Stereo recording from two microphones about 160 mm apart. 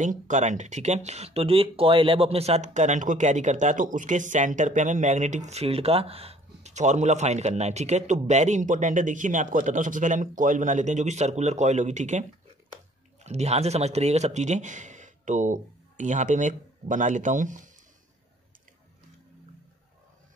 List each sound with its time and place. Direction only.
0.0 s speech: 50° right (ahead or behind)